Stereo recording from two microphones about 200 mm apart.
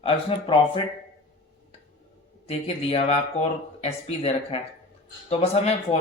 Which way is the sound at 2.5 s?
30° left (ahead or behind).